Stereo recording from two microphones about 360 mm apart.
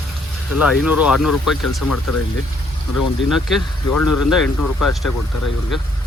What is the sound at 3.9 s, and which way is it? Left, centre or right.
Speech, left.